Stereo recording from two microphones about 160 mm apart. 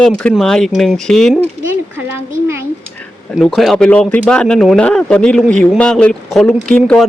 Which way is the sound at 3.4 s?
Centre (ahead or behind).